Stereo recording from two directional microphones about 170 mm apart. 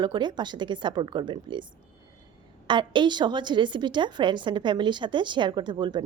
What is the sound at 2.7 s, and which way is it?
A woman's voice, 25° right (ahead or behind).